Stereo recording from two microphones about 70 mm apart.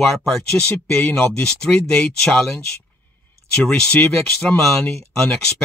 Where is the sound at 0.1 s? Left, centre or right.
Centre.